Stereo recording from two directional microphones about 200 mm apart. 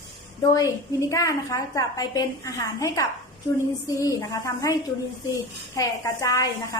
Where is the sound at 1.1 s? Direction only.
15° left (ahead or behind).